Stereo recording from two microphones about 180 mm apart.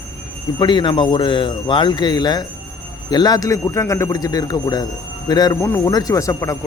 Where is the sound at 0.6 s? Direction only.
25° left (ahead or behind).